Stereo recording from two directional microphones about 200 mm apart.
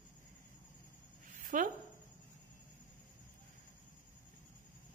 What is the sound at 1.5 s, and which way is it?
Speech, 40° right (ahead or behind).